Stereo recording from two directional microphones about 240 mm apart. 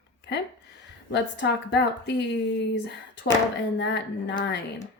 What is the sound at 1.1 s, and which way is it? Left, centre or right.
A woman's voice, left.